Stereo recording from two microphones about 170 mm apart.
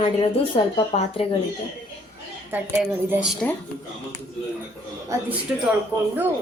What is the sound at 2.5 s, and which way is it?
Speech, 10° right (ahead or behind).